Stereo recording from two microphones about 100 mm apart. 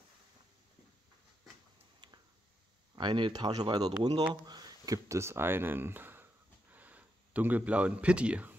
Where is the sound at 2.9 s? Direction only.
50° right (ahead or behind).